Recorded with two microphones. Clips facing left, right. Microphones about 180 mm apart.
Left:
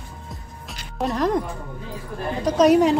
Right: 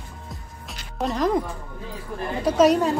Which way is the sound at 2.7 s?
15° left (ahead or behind).